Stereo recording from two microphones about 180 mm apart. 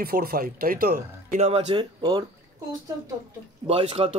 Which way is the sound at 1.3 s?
35° right (ahead or behind).